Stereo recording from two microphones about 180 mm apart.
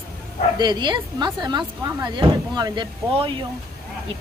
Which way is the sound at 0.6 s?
25° right (ahead or behind).